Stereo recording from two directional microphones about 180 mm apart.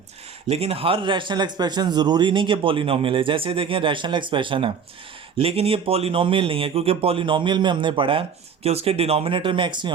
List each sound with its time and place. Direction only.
0.4 s speech: 30° right (ahead or behind)